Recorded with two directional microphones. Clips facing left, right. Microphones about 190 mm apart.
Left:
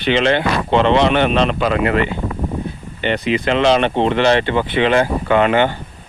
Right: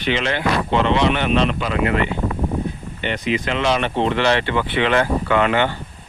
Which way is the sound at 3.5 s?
25° left (ahead or behind).